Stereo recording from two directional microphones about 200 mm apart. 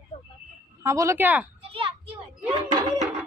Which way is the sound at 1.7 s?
25° right (ahead or behind).